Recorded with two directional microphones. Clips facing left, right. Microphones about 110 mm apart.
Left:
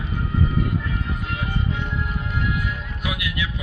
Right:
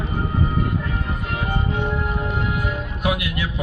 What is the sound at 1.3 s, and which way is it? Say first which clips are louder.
Music: right 4 dB; 50° right (ahead or behind).